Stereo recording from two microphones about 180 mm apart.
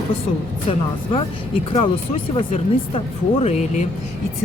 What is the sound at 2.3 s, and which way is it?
Speech, 30° left (ahead or behind).